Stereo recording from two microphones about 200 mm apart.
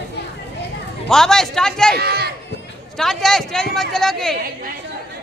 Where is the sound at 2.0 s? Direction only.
50° right (ahead or behind).